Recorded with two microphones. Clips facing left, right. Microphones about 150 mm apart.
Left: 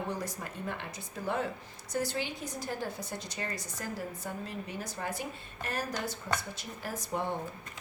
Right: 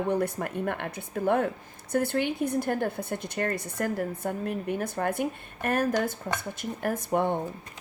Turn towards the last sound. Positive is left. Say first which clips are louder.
# right 8 dB
turn(degrees=-55)  # may be behind; listen again after turning